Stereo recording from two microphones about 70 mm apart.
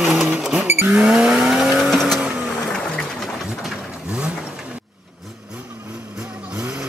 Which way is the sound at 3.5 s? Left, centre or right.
Centre.